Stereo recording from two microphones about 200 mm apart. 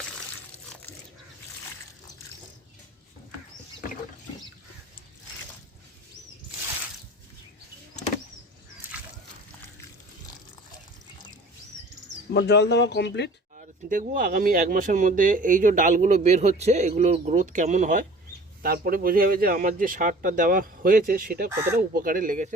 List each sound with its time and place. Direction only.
12.3 s speech: 55° left (ahead or behind)
13.6 s speech: 40° right (ahead or behind)